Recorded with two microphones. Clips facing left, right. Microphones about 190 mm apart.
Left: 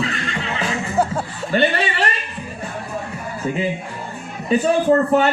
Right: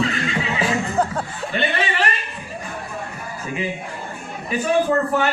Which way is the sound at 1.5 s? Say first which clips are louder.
Left 4 dB; 35° left (ahead or behind).